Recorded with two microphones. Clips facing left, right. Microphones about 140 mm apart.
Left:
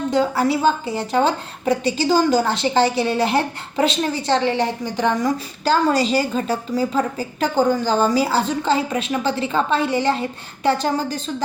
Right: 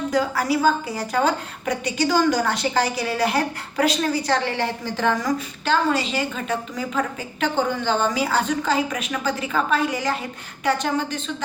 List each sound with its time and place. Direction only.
0.1 s a woman's voice: 25° left (ahead or behind)
5.6 s a woman's voice: 35° left (ahead or behind)